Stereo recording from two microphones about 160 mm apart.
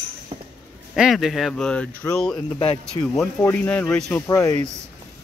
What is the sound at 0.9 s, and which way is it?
Speech, centre (ahead or behind).